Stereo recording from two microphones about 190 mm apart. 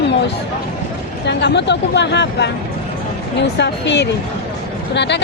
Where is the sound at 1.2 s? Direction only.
65° left (ahead or behind).